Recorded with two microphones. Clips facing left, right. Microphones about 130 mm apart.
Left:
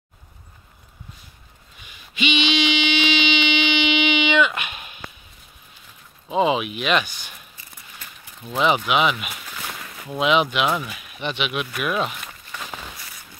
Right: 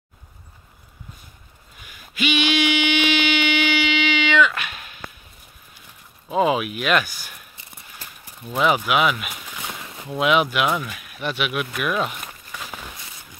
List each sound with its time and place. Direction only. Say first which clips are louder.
2.1 s a sound: right 1 dB; 10° right (ahead or behind)
3.8 s music: left 1 dB; 20° left (ahead or behind)
6.2 s speech: even; centre (ahead or behind)
8.4 s speech: even; 5° right (ahead or behind)
9.6 s a sound: right 1 dB; 15° right (ahead or behind)
10.0 s speech: even; 5° right (ahead or behind)
10.7 s speech: even; 10° left (ahead or behind)
11.1 s speech: right 1 dB; 5° right (ahead or behind)
12.5 s a sound: left 1 dB; centre (ahead or behind)